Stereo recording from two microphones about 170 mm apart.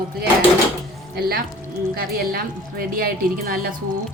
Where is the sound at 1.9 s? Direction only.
60° right (ahead or behind).